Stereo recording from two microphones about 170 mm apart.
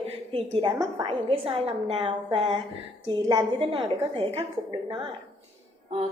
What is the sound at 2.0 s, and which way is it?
Speech, 30° right (ahead or behind).